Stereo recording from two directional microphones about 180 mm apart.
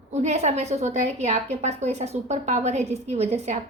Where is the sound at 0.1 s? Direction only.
40° right (ahead or behind).